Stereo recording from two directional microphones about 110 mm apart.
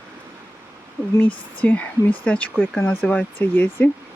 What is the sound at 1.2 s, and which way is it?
Speech, 15° left (ahead or behind).